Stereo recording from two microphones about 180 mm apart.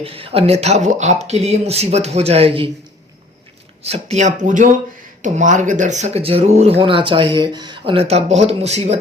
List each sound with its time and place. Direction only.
0.0 s speech: 30° right (ahead or behind)
3.8 s speech: 35° right (ahead or behind)